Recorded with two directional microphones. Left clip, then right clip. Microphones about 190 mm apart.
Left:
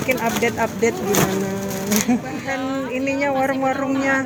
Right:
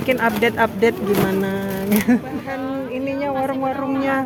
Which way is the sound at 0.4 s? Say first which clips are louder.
Right 3 dB; 25° right (ahead or behind).